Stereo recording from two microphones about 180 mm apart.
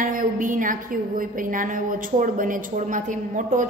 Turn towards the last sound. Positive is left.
turn(degrees=-45)  # may be behind; listen again after turning